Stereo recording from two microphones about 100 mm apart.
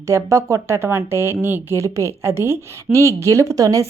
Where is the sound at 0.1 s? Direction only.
30° right (ahead or behind).